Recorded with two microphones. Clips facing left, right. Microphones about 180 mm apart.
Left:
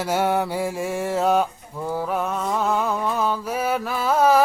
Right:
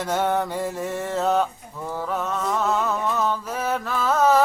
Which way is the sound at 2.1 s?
10° left (ahead or behind).